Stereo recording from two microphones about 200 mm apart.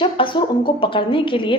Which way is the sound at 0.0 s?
25° left (ahead or behind).